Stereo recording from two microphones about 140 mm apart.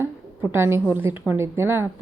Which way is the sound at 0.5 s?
15° right (ahead or behind).